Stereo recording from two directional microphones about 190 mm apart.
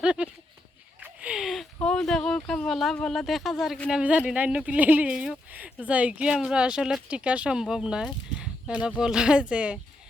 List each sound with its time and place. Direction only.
0.0 s speech: 5° right (ahead or behind)